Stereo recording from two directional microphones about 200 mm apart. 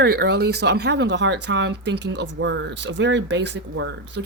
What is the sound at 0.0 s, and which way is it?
A woman's voice, 55° right (ahead or behind).